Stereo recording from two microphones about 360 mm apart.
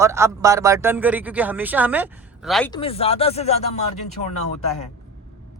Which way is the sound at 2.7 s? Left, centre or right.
Centre.